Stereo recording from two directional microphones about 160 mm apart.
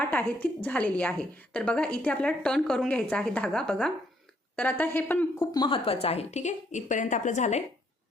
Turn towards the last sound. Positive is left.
turn(degrees=50)  # may be behind; listen again after turning